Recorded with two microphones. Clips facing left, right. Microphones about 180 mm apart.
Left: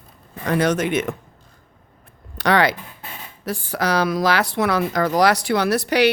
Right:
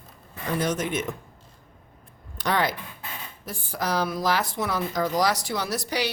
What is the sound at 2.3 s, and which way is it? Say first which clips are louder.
A woman's voice: left 7 dB; 75° left (ahead or behind).